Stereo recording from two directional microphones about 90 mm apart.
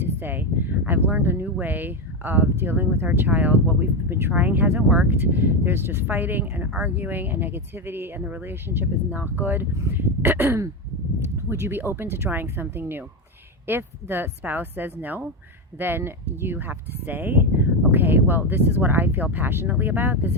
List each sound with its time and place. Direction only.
0.0 s speech: 25° right (ahead or behind)